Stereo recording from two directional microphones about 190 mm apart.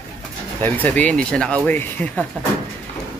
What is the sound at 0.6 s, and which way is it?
Speech, 10° left (ahead or behind).